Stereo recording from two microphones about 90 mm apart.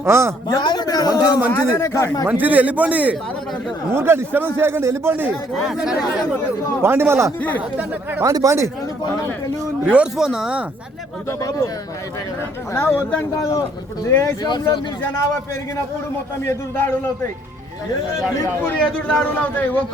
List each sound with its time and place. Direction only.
0.0 s a man's voice: 30° right (ahead or behind)
0.5 s a man's voice: 55° left (ahead or behind); by 2.0 s 35° left (ahead or behind)
2.2 s a man's voice: 20° right (ahead or behind)
3.9 s a man's voice: 25° right (ahead or behind)
5.5 s speech: 5° right (ahead or behind)
6.8 s a man's voice: 25° right (ahead or behind)
9.8 s a man's voice: 10° right (ahead or behind)
11.3 s speech: 40° left (ahead or behind)
12.7 s a man's voice: 25° left (ahead or behind)
13.3 s speech: 40° left (ahead or behind)
14.4 s speech: 55° left (ahead or behind)
16.5 s a man's voice: 25° left (ahead or behind)
18.8 s a man's voice: 5° left (ahead or behind)
19.3 s a man's voice: 20° left (ahead or behind)